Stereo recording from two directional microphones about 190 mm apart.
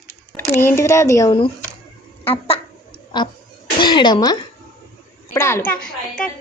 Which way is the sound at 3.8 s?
25° left (ahead or behind).